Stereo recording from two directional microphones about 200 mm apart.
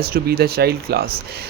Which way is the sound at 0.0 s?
50° right (ahead or behind).